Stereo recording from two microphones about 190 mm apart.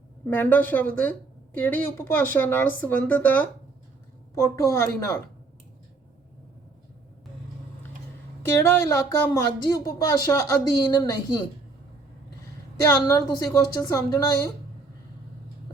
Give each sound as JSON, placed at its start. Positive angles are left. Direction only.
{"t": 0.3, "sound": "speech", "side_deg": 10}
{"t": 4.6, "sound": "speech", "side_deg": 15}
{"t": 8.4, "sound": "speech", "side_deg": 15}
{"t": 12.8, "sound": "speech", "side_deg": 15}